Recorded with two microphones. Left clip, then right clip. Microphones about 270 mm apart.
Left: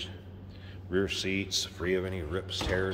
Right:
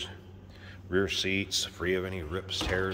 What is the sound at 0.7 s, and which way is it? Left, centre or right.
Speech, centre.